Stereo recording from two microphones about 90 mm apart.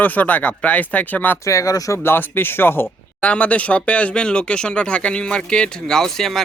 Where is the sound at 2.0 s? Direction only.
25° left (ahead or behind).